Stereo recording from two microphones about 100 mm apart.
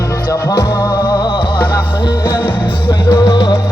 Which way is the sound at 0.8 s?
40° left (ahead or behind).